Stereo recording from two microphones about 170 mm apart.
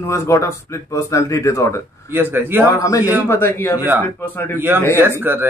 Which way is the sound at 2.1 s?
10° right (ahead or behind).